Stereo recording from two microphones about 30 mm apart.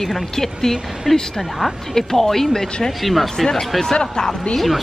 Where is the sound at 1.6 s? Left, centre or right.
Centre.